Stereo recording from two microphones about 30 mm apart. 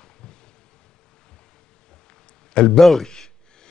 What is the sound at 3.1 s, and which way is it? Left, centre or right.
Gasp, left.